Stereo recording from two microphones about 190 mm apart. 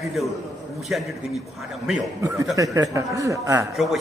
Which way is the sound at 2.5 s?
15° right (ahead or behind).